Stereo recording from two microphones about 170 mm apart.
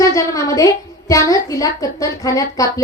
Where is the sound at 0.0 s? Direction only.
20° left (ahead or behind).